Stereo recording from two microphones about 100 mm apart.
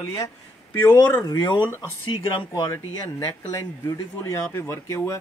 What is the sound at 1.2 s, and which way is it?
Speech, 45° left (ahead or behind).